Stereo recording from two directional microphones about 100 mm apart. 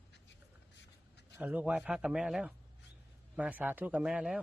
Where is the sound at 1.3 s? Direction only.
15° right (ahead or behind).